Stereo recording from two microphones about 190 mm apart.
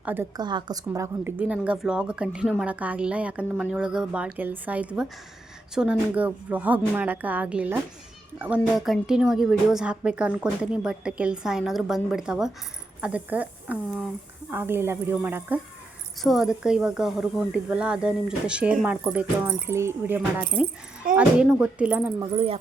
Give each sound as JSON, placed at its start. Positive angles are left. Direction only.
{"t": 0.0, "sound": "a woman's voice", "side_deg": -10}
{"t": 0.3, "sound": "a woman's voice", "side_deg": -20}
{"t": 22.2, "sound": "speech", "side_deg": -30}